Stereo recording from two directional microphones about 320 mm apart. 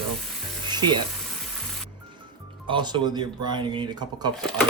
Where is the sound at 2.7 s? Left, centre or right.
Centre.